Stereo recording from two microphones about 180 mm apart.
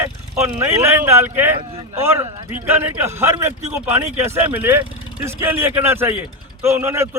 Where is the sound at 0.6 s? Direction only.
15° right (ahead or behind).